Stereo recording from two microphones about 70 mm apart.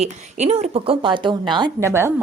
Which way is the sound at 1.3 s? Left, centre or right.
Right.